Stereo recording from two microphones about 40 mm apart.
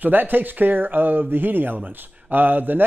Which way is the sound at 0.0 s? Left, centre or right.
Right.